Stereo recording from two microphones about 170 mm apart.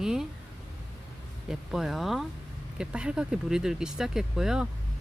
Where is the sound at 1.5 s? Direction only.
Centre (ahead or behind).